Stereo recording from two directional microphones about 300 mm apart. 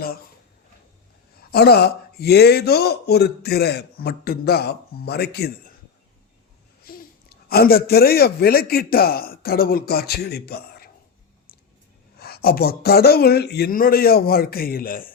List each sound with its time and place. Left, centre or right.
1.4 s a man's voice: left
6.8 s speech: left
12.2 s a man's voice: left